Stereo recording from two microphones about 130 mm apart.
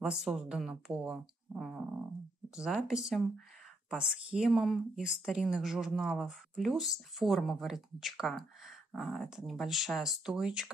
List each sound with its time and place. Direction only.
0.0 s speech: 5° right (ahead or behind)